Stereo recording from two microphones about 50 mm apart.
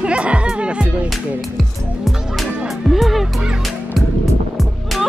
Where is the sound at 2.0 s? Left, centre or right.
Centre.